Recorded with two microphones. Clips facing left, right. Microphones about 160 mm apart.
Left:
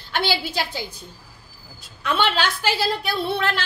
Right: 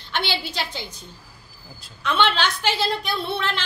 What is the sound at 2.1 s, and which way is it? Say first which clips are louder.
A woman's voice: even; 10° left (ahead or behind).